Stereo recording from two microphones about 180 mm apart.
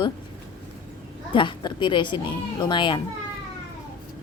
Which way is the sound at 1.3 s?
25° left (ahead or behind).